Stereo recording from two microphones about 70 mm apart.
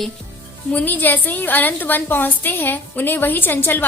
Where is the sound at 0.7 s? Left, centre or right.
Left.